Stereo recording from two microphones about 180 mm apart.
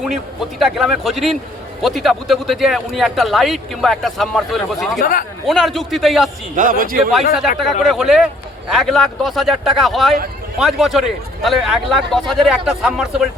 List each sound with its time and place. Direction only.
0.0 s speech: centre (ahead or behind)
4.9 s speech: 50° left (ahead or behind)
5.5 s speech: centre (ahead or behind)
6.6 s speech: 50° right (ahead or behind)
7.6 s speech: centre (ahead or behind)